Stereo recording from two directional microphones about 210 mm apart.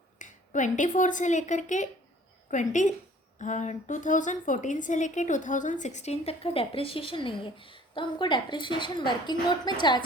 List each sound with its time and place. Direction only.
0.2 s a woman's voice: 35° left (ahead or behind); by 10.0 s 20° left (ahead or behind)